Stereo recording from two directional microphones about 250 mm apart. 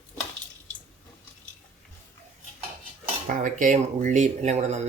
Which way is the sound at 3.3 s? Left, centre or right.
Right.